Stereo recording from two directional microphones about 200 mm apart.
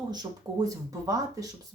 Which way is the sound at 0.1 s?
20° right (ahead or behind).